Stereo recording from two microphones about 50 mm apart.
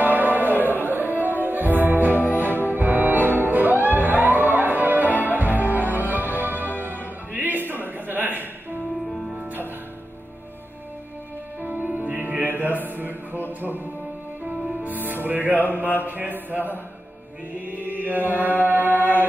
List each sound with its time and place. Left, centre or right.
0.0 s music: right
11.6 s music: right
17.6 s mantra: right
18.6 s music: right